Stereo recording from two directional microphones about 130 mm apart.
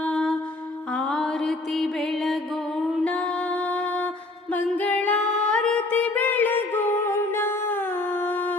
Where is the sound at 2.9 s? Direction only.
10° left (ahead or behind).